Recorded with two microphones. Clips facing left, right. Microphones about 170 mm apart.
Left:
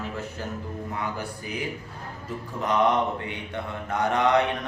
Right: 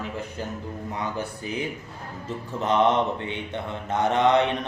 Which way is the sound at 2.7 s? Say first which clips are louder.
Right 2 dB; 25° right (ahead or behind).